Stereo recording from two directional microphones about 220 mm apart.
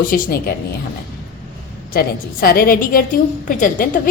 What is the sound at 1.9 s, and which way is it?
A woman's voice, 45° left (ahead or behind).